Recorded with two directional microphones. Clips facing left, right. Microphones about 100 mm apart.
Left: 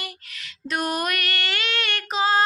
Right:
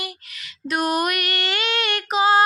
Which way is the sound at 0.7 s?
5° right (ahead or behind).